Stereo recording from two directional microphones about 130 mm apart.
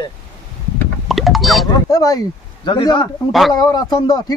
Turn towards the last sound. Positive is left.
turn(degrees=35)  # may be behind; listen again after turning